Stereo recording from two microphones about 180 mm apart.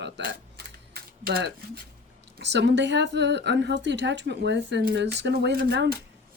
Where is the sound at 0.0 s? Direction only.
60° right (ahead or behind).